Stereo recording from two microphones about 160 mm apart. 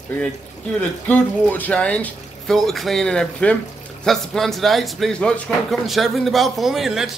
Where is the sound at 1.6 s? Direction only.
5° left (ahead or behind).